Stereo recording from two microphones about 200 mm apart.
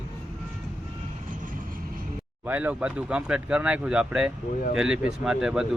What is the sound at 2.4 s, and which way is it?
Speech, 5° right (ahead or behind).